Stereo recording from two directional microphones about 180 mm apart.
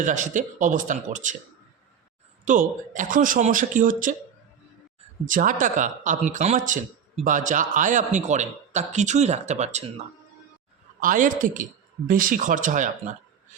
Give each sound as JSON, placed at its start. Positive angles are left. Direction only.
{"t": 0.0, "sound": "speech", "side_deg": -45}
{"t": 2.4, "sound": "speech", "side_deg": -45}
{"t": 5.2, "sound": "a man's voice", "side_deg": -45}
{"t": 11.0, "sound": "speech", "side_deg": -50}